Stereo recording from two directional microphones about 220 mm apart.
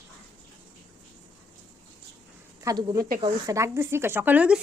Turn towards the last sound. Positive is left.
turn(degrees=-5)  # may be behind; listen again after turning